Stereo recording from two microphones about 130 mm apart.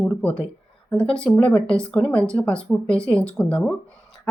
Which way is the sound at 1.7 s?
5° left (ahead or behind).